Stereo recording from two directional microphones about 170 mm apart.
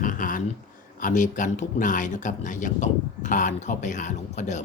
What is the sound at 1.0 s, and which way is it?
Speech, 50° left (ahead or behind).